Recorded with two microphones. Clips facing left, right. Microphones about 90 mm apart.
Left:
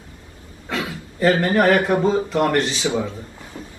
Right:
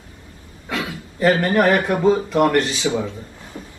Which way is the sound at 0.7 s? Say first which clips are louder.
Even; 20° left (ahead or behind).